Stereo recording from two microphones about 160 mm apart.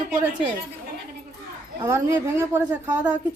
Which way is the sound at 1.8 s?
15° right (ahead or behind).